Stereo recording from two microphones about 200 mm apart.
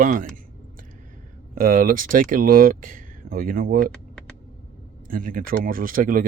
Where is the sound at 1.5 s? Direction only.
45° right (ahead or behind).